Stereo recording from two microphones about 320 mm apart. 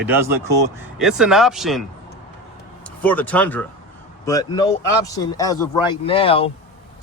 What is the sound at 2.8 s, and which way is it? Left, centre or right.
Speech, centre.